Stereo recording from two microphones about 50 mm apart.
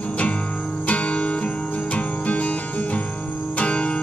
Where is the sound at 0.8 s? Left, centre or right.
Left.